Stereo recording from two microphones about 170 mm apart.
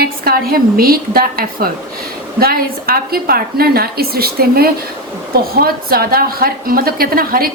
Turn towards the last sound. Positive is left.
turn(degrees=-60)  # may be behind; listen again after turning